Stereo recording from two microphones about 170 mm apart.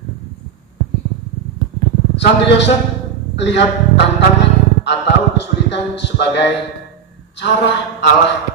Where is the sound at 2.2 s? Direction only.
90° left.